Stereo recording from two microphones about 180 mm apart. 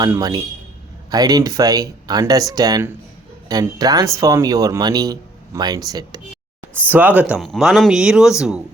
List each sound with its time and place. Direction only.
0.0 s speech: 20° right (ahead or behind)
6.7 s speech: 10° right (ahead or behind)